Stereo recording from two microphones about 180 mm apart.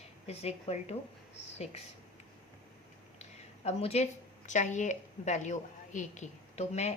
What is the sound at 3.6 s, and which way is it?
A woman's voice, 35° left (ahead or behind).